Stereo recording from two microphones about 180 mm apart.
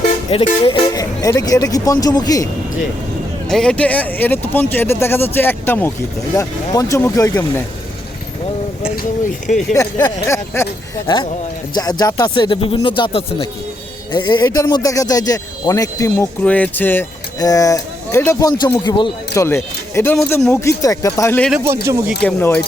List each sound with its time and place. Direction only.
0.6 s speech: 25° left (ahead or behind)
3.5 s speech: 5° left (ahead or behind)
9.0 s speech: 50° left (ahead or behind)
9.7 s speech: 15° left (ahead or behind)
21.5 s speech: 15° right (ahead or behind)
22.2 s speech: 10° left (ahead or behind)